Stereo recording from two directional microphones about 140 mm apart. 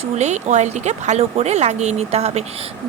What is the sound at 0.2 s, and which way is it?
A woman's voice, 55° right (ahead or behind).